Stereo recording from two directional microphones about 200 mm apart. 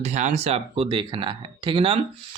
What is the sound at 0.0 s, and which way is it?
Speech, 35° right (ahead or behind).